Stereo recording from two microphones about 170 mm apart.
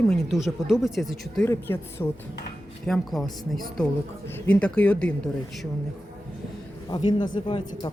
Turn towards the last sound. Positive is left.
turn(degrees=25)  # may be behind; listen again after turning